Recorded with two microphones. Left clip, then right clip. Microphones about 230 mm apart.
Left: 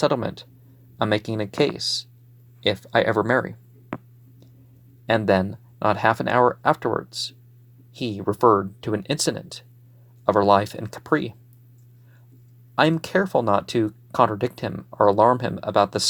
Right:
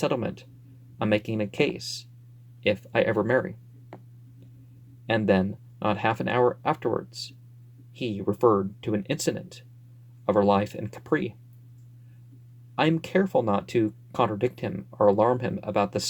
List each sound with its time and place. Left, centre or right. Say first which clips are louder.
0.0 s speech: left 5 dB; left
2.9 s speech: left 5 dB; centre
5.1 s speech: left 4 dB; centre
12.7 s speech: left 4 dB; centre